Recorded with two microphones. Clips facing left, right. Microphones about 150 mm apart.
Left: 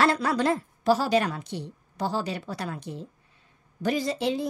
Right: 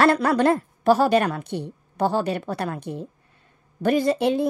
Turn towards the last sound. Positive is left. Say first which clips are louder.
# right 7 dB
turn(degrees=-55)  # may be behind; listen again after turning